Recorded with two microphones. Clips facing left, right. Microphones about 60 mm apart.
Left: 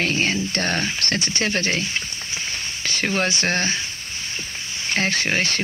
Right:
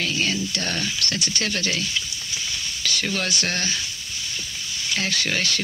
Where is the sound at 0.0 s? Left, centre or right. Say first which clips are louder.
Left 3 dB; left.